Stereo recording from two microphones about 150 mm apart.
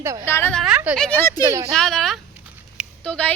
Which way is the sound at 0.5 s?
5° right (ahead or behind).